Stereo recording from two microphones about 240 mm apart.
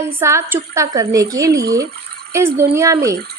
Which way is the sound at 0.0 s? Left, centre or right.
Centre.